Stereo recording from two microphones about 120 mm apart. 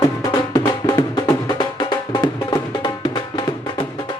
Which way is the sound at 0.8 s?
35° left (ahead or behind).